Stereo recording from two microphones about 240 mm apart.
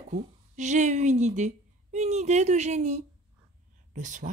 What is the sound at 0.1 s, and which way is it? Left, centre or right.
A woman's voice, right.